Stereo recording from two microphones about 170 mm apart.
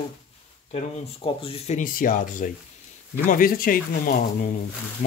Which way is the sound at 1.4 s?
40° left (ahead or behind).